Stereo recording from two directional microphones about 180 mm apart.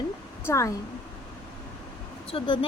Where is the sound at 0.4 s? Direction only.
15° left (ahead or behind).